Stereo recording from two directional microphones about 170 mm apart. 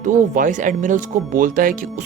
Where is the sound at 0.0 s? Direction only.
50° right (ahead or behind).